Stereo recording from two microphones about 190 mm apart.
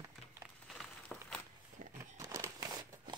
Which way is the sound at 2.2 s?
15° right (ahead or behind).